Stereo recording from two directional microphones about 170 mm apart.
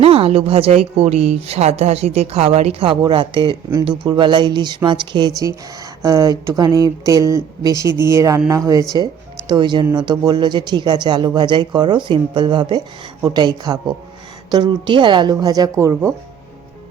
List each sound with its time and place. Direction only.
0.0 s a woman's voice: 35° right (ahead or behind); by 16.1 s 15° right (ahead or behind)